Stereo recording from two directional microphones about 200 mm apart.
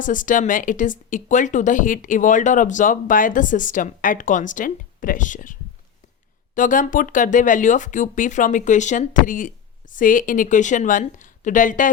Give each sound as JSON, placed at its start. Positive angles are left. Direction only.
{"t": 0.0, "sound": "speech", "side_deg": 40}